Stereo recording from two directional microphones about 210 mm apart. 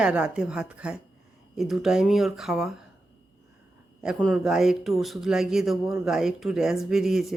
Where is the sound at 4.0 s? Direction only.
5° right (ahead or behind).